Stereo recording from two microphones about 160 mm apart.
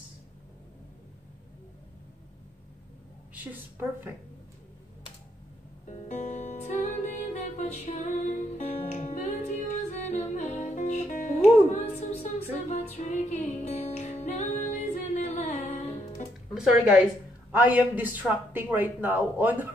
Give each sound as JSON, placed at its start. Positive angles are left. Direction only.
{"t": 5.9, "sound": "music", "side_deg": 45}
{"t": 16.5, "sound": "a man's voice", "side_deg": -5}